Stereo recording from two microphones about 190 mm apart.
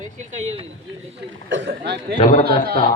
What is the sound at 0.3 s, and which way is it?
Speech, 35° right (ahead or behind).